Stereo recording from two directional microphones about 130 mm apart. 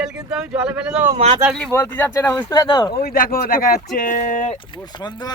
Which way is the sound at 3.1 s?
90° left.